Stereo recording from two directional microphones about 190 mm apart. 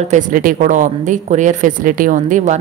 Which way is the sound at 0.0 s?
40° right (ahead or behind).